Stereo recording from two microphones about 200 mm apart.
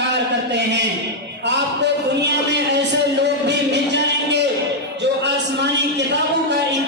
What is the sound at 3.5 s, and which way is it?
Music, 60° right (ahead or behind).